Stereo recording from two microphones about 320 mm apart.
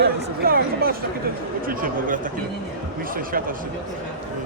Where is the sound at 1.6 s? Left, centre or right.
Right.